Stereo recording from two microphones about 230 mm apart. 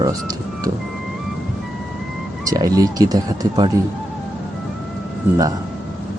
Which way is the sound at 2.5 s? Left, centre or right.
Centre.